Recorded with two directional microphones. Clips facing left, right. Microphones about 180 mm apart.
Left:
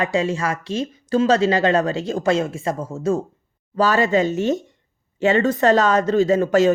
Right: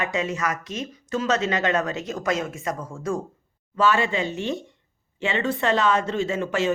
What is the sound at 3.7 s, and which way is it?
Speech, 40° left (ahead or behind).